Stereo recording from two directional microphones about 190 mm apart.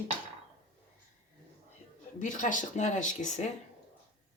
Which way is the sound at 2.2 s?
40° left (ahead or behind).